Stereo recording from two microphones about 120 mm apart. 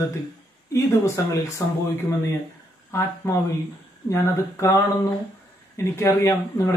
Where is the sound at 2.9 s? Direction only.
20° left (ahead or behind).